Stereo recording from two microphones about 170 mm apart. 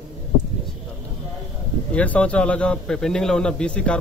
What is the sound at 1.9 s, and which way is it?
A man's voice, 5° left (ahead or behind).